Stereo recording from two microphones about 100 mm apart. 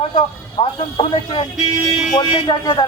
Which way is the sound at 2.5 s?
45° left (ahead or behind).